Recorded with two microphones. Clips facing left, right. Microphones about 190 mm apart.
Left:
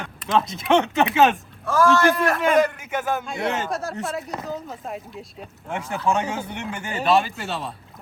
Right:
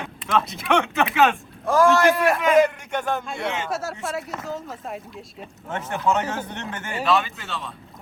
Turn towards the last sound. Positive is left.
turn(degrees=40)  # may be behind; listen again after turning